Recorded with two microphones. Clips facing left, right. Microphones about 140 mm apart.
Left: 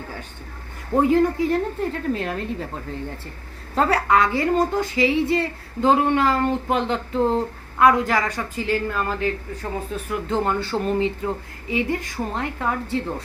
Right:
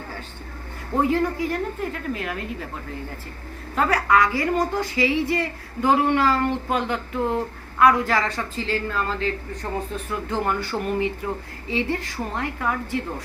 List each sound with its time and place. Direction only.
1.0 s a woman's voice: 20° left (ahead or behind)
3.8 s a woman's voice: 30° left (ahead or behind)
9.6 s speech: 5° left (ahead or behind)
10.2 s a woman's voice: 25° left (ahead or behind)